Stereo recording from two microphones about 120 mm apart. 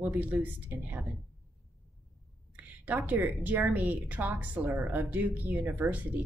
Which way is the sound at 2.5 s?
15° right (ahead or behind).